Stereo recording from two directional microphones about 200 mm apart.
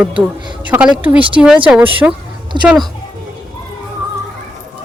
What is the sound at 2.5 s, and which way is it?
Speech, 25° right (ahead or behind).